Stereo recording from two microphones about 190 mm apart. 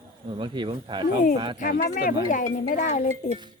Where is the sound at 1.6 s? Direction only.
45° left (ahead or behind).